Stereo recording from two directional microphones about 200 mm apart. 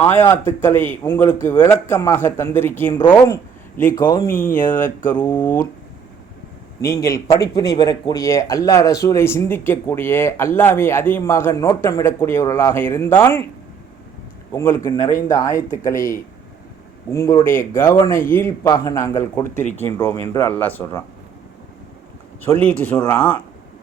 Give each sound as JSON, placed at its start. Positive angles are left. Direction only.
{"t": 0.0, "sound": "speech", "side_deg": 10}
{"t": 4.3, "sound": "speech", "side_deg": 45}
{"t": 5.2, "sound": "speech", "side_deg": 10}
{"t": 6.8, "sound": "speech", "side_deg": 15}
{"t": 14.5, "sound": "speech", "side_deg": 10}
{"t": 22.4, "sound": "speech", "side_deg": 5}